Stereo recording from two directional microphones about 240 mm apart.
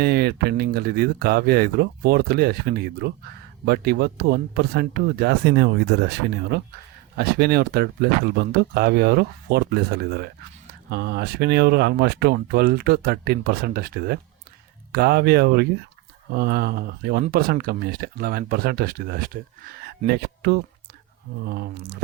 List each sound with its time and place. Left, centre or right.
0.0 s speech: right